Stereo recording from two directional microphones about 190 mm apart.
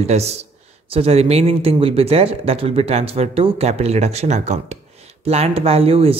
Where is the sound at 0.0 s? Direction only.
35° right (ahead or behind).